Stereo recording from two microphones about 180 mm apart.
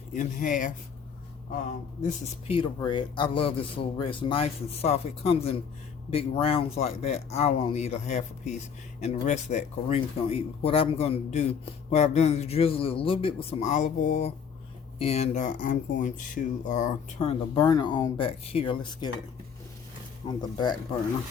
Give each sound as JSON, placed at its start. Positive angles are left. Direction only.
{"t": 0.1, "sound": "speech", "side_deg": 45}
{"t": 2.0, "sound": "speech", "side_deg": 35}
{"t": 20.2, "sound": "speech", "side_deg": 25}